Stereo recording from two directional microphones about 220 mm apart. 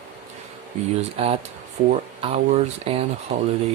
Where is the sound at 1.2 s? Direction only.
25° right (ahead or behind).